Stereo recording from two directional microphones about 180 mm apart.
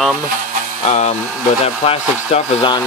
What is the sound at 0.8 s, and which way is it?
Speech, 40° left (ahead or behind).